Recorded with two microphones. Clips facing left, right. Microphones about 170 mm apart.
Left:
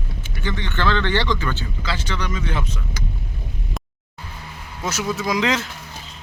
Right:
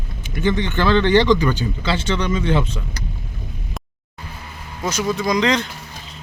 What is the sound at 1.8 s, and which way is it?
Speech, 30° right (ahead or behind).